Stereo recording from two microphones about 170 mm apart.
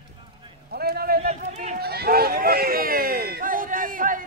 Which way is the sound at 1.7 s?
65° right (ahead or behind).